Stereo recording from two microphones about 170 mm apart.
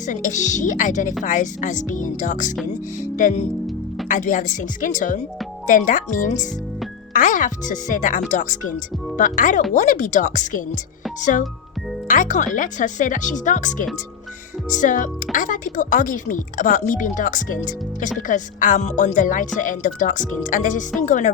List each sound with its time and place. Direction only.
0.0 s speech: 50° left (ahead or behind)